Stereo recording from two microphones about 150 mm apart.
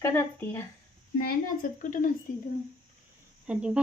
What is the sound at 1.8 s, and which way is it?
Speech, 60° left (ahead or behind).